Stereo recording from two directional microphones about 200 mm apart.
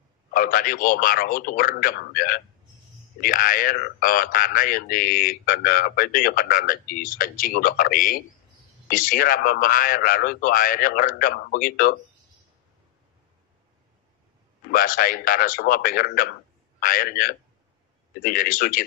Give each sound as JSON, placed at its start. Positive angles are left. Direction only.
{"t": 0.3, "sound": "speech", "side_deg": 45}
{"t": 14.7, "sound": "speech", "side_deg": 45}